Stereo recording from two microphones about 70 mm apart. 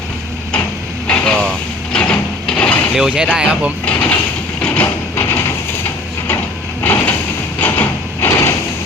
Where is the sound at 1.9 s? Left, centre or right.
Centre.